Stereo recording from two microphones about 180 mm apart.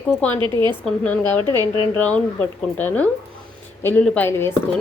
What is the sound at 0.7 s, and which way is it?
A woman's voice, 10° left (ahead or behind).